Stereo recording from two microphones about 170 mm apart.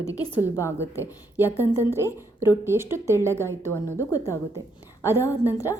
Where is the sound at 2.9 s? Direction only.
15° right (ahead or behind).